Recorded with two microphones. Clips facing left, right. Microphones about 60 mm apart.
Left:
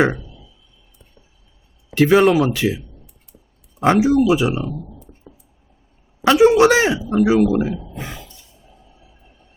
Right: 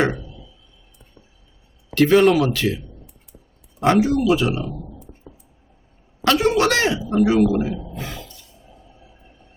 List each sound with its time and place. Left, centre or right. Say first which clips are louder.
2.0 s speech: left 1 dB; centre
4.6 s speech: left 2 dB; centre
6.2 s speech: left 6 dB; centre
7.0 s a man's voice: left 1 dB; centre
7.9 s a sound: even; centre